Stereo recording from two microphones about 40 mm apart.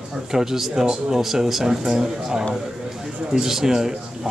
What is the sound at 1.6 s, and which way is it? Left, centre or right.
Speech, centre.